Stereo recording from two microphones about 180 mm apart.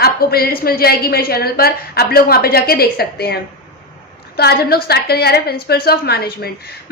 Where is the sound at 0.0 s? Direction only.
60° left (ahead or behind).